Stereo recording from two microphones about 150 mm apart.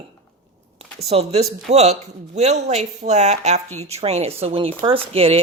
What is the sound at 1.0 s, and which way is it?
A woman's voice, 45° right (ahead or behind).